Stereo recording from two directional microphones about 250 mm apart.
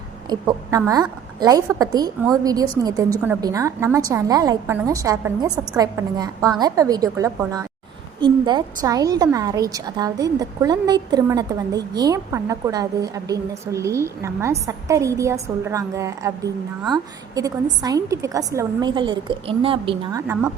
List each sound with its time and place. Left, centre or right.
0.3 s a woman's voice: centre